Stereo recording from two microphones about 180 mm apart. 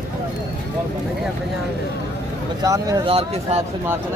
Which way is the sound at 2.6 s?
20° right (ahead or behind).